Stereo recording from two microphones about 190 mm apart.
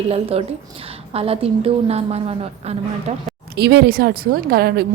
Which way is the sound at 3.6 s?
60° right (ahead or behind).